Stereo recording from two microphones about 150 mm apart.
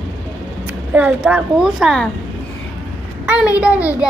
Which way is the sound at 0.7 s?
10° right (ahead or behind).